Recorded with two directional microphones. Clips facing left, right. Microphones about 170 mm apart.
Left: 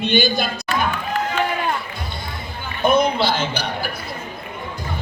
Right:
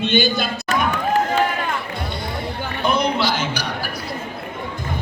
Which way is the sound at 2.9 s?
55° left (ahead or behind).